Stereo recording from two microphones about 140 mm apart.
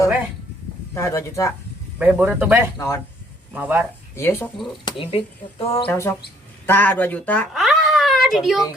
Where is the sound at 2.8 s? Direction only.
20° left (ahead or behind).